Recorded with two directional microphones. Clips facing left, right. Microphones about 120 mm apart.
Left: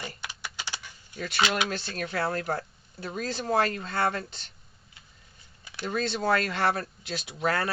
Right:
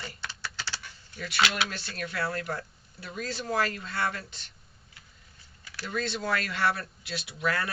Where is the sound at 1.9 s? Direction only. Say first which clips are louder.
Left 3 dB; 30° left (ahead or behind).